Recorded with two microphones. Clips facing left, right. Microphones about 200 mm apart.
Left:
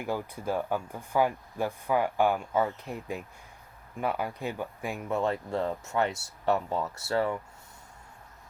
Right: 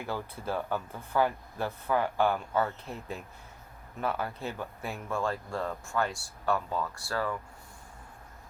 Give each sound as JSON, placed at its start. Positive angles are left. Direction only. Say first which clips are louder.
{"t": 0.0, "sound": "speech", "louder": "left 3 dB", "side_deg": 15}